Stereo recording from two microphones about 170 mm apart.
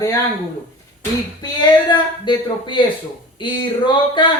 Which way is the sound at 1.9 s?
25° left (ahead or behind).